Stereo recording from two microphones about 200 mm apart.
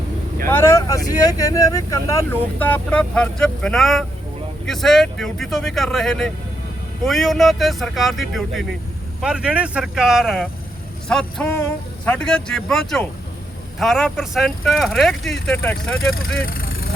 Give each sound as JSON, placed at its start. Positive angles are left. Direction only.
{"t": 0.4, "sound": "speech", "side_deg": 15}
{"t": 16.1, "sound": "speech", "side_deg": 50}